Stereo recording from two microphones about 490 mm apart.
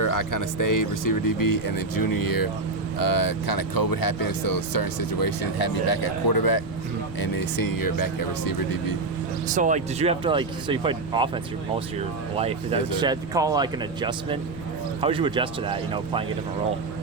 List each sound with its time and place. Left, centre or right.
0.0 s speech: left
9.5 s speech: centre